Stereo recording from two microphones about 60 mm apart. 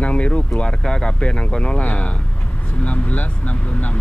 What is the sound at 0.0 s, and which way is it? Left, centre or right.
Speech, centre.